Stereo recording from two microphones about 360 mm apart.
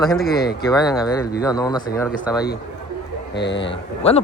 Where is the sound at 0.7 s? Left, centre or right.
Centre.